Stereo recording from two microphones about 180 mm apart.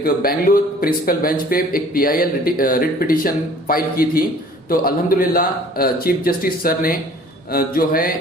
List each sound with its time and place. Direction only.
0.0 s a man's voice: 55° left (ahead or behind)